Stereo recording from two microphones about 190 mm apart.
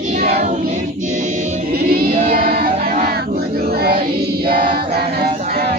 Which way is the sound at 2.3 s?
55° right (ahead or behind).